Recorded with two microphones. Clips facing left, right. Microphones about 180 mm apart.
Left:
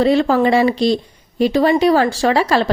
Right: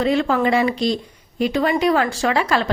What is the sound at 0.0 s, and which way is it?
A woman's voice, 35° left (ahead or behind).